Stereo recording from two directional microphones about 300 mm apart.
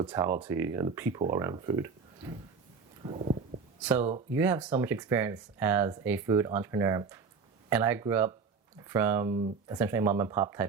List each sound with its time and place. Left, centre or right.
0.0 s speech: centre
3.0 s a sound: centre
3.8 s speech: centre